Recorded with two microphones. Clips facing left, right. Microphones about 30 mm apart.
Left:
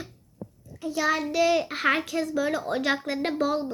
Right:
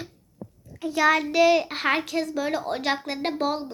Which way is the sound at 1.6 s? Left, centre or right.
Right.